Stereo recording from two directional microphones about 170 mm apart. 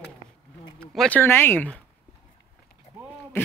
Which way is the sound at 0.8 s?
5° left (ahead or behind).